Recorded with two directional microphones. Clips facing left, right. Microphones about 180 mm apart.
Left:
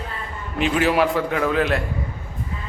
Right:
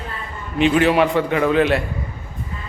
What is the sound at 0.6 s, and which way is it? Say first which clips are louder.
A man's voice: right 4 dB; centre (ahead or behind).